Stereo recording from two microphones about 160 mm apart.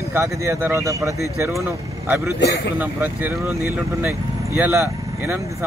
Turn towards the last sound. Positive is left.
turn(degrees=-15)  # may be behind; listen again after turning